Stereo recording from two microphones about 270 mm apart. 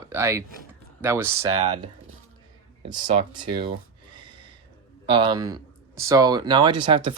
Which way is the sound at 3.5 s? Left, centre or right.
Centre.